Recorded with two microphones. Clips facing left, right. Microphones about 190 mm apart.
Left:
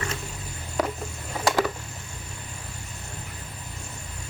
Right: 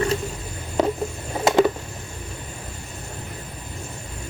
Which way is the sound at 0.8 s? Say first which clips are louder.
Right 6 dB; 25° right (ahead or behind).